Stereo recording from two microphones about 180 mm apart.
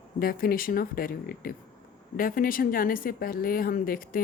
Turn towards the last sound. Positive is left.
turn(degrees=55)  # may be behind; listen again after turning